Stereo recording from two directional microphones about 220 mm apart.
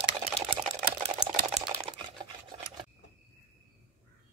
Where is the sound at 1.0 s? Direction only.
25° right (ahead or behind).